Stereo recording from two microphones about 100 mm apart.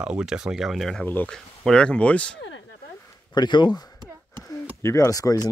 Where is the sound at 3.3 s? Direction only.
50° left (ahead or behind).